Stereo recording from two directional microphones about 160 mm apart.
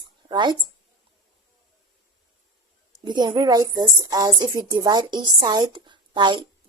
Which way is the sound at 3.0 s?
25° right (ahead or behind).